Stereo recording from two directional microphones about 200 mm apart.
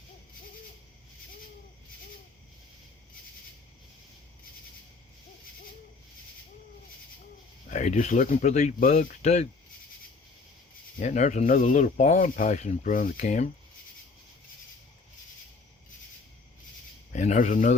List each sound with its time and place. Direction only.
7.7 s speech: 35° left (ahead or behind)
11.0 s speech: 35° left (ahead or behind)
17.1 s speech: 35° left (ahead or behind)